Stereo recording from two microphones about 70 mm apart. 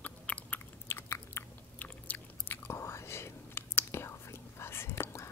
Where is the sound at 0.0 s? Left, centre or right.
Left.